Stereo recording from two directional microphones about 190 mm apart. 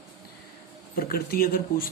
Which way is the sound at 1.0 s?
55° left (ahead or behind).